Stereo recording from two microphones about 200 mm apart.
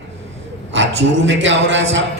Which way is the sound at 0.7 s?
65° right (ahead or behind).